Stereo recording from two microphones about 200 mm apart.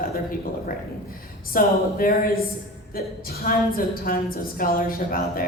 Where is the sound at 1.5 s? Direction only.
45° left (ahead or behind).